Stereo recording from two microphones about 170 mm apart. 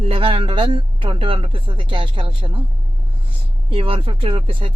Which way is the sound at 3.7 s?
35° right (ahead or behind).